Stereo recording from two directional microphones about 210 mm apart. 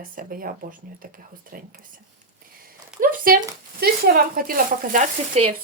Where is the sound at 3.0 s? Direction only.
40° right (ahead or behind).